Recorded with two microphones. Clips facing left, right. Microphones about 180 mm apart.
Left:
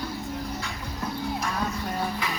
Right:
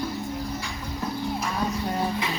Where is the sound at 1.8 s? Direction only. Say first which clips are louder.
Right 3 dB; 20° right (ahead or behind).